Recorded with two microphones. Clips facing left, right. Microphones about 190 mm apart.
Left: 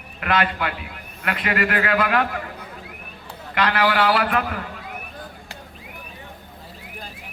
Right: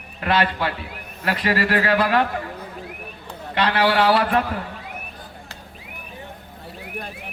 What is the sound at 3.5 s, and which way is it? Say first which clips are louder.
A man's voice: right 1 dB; 30° right (ahead or behind).